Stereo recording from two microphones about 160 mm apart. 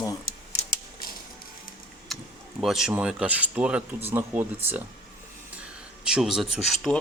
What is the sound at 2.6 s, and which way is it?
Speech, centre (ahead or behind).